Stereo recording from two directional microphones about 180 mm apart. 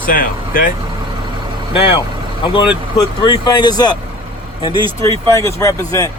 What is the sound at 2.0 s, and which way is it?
Vehicle, 25° left (ahead or behind).